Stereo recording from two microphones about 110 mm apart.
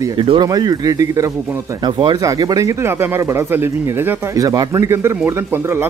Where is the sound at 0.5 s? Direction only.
35° right (ahead or behind); by 4.2 s 20° right (ahead or behind).